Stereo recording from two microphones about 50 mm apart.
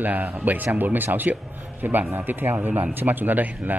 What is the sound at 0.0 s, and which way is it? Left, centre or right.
Speech, right.